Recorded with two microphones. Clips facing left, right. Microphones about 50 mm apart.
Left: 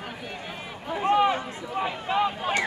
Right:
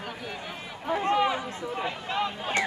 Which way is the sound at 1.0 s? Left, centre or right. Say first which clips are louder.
Left 5 dB; centre.